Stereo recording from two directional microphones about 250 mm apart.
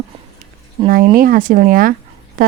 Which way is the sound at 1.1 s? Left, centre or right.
Right.